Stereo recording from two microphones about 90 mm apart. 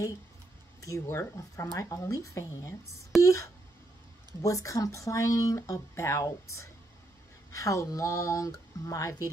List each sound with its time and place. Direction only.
0.7 s speech: 35° left (ahead or behind)